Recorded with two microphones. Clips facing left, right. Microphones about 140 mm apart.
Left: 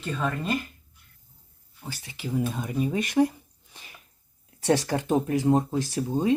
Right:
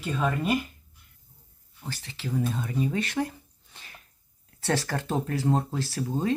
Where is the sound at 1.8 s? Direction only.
10° left (ahead or behind).